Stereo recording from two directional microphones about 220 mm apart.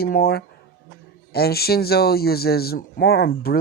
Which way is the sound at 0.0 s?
45° left (ahead or behind).